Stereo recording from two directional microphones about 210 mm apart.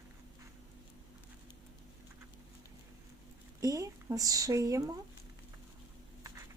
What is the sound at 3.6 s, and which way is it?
Speech, 15° right (ahead or behind).